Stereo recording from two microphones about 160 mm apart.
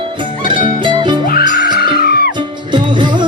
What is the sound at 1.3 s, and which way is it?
Music, 80° left.